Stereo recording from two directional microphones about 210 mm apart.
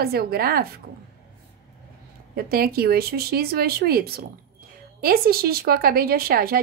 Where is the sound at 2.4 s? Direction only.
45° right (ahead or behind).